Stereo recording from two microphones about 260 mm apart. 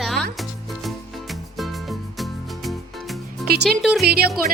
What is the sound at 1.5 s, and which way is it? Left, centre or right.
Music, centre.